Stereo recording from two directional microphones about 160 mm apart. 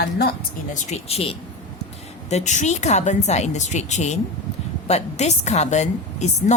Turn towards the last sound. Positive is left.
turn(degrees=45)  # may be behind; listen again after turning